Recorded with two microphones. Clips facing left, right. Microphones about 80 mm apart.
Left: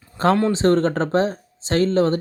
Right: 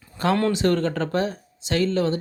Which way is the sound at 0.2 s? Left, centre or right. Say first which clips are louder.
Left 3 dB; left.